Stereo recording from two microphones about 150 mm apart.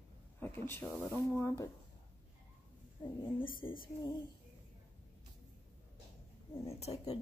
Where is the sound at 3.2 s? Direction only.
35° left (ahead or behind).